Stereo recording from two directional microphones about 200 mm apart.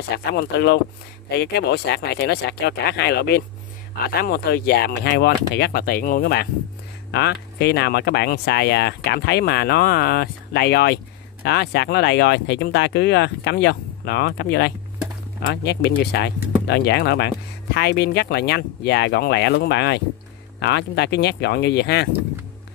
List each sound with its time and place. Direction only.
0.3 s speech: 55° left (ahead or behind)